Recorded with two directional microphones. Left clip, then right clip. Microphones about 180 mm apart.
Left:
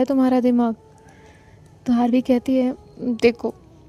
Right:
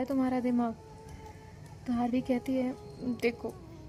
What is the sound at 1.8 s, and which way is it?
A woman's voice, 50° left (ahead or behind).